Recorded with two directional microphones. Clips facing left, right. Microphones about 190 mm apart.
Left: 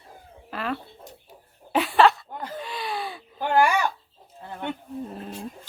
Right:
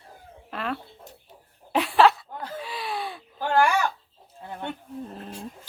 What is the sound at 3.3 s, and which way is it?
Crow, 15° left (ahead or behind).